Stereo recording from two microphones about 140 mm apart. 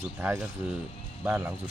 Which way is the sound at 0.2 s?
15° right (ahead or behind).